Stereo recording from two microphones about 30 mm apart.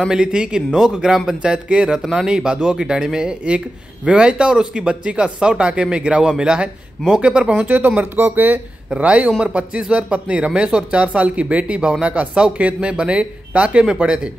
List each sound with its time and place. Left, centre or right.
0.1 s speech: right
0.7 s speech: centre
1.2 s speech: right
3.4 s speech: right
6.2 s speech: right
7.2 s speech: right
7.6 s speech: right
8.9 s speech: right